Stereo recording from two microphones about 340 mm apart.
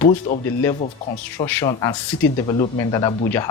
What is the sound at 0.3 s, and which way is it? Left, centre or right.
Speech, centre.